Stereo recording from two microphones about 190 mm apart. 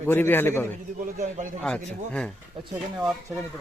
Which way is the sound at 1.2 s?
45° right (ahead or behind).